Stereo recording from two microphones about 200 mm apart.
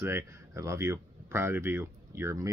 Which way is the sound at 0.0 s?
15° right (ahead or behind).